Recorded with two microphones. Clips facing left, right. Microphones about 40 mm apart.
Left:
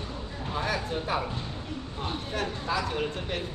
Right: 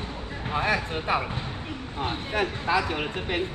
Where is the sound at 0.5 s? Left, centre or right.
Right.